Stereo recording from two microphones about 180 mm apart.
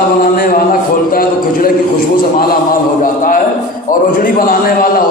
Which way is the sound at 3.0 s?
50° left (ahead or behind).